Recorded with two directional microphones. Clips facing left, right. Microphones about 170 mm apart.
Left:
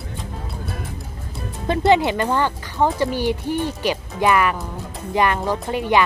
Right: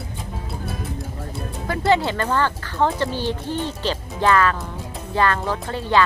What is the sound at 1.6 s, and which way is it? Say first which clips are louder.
Speech: left 3 dB; 20° left (ahead or behind).